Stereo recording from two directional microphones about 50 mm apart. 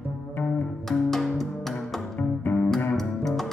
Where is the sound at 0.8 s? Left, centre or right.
Centre.